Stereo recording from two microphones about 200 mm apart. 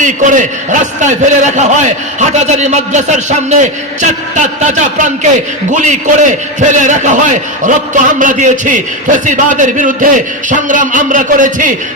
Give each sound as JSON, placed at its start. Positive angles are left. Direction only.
{"t": 0.0, "sound": "a man's voice", "side_deg": -40}